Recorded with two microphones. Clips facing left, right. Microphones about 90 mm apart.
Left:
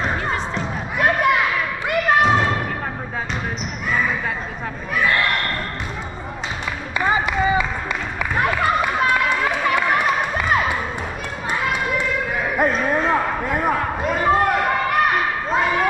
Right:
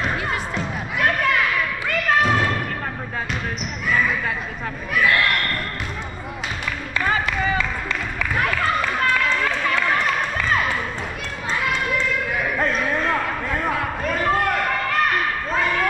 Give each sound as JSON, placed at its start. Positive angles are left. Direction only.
{"t": 0.0, "sound": "music", "side_deg": 0}
{"t": 0.9, "sound": "children playing", "side_deg": 15}
{"t": 2.2, "sound": "thump", "side_deg": 25}
{"t": 5.0, "sound": "a sound", "side_deg": 10}
{"t": 7.0, "sound": "clapping", "side_deg": 20}
{"t": 8.4, "sound": "run", "side_deg": 15}
{"t": 11.7, "sound": "basketball bounce", "side_deg": 15}
{"t": 12.9, "sound": "a sound", "side_deg": 20}